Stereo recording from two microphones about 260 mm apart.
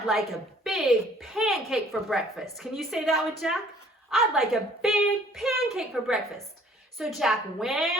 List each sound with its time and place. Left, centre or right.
0.1 s a woman's voice: centre